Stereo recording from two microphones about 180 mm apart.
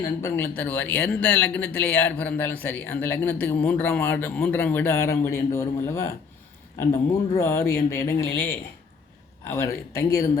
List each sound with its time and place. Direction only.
0.2 s speech: 15° left (ahead or behind)
7.3 s speech: 15° left (ahead or behind)
9.5 s speech: 15° left (ahead or behind)